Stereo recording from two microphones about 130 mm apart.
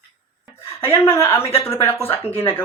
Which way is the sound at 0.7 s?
20° left (ahead or behind).